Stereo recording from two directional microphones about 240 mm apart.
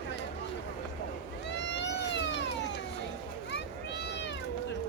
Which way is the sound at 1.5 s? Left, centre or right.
Left.